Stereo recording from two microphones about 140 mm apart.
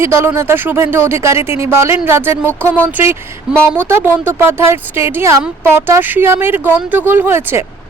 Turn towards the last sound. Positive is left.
turn(degrees=-15)  # may be behind; listen again after turning